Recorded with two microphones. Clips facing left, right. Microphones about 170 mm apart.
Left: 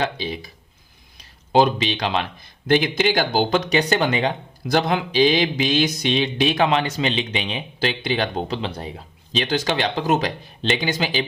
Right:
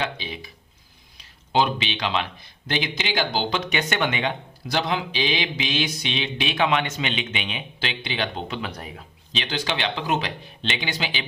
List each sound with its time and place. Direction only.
0.0 s speech: 40° left (ahead or behind)
1.5 s speech: 40° left (ahead or behind)
9.4 s speech: 45° left (ahead or behind)